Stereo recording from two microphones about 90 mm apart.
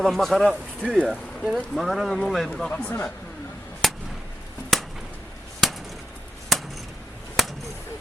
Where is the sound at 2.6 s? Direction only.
15° left (ahead or behind).